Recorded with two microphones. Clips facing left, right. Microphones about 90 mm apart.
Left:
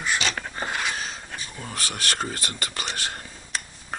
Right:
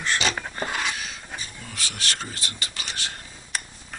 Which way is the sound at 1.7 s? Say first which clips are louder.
Left 3 dB; 45° left (ahead or behind).